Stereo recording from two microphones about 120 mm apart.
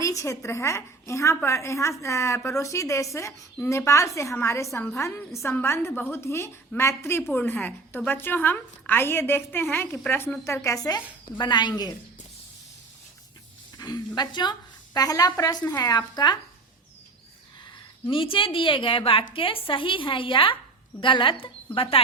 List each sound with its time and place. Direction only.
0.0 s a woman's voice: 25° left (ahead or behind)
13.7 s a woman's voice: 30° left (ahead or behind)
18.1 s speech: 45° left (ahead or behind)